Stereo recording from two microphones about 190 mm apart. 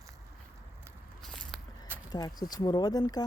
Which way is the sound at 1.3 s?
5° left (ahead or behind).